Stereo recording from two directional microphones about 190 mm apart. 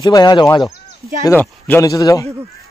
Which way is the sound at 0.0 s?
20° left (ahead or behind).